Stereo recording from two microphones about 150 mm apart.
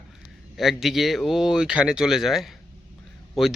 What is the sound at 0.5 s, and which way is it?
Speech, centre (ahead or behind).